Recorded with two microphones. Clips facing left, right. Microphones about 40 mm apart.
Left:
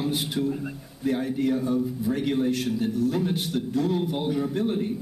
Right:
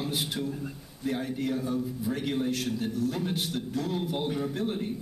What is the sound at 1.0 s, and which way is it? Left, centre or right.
A man's voice, centre.